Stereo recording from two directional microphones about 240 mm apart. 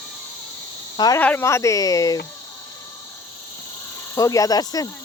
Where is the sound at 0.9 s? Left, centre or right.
Centre.